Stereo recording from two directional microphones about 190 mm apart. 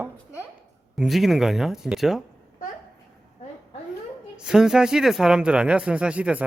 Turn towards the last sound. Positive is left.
turn(degrees=-5)  # may be behind; listen again after turning